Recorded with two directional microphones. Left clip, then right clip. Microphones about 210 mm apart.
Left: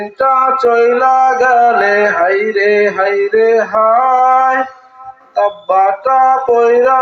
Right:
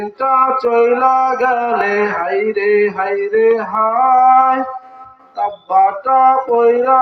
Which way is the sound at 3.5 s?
40° right (ahead or behind).